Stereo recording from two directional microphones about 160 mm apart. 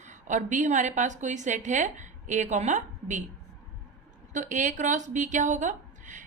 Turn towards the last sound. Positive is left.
turn(degrees=-50)  # may be behind; listen again after turning